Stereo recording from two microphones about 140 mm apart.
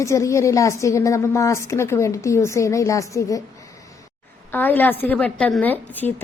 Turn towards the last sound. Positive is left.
turn(degrees=15)  # may be behind; listen again after turning